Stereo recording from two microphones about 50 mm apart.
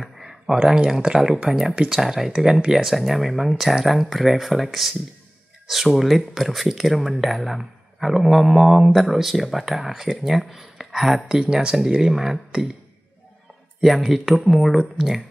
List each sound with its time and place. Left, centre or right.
0.0 s speech: centre
11.4 s speech: centre
13.7 s speech: centre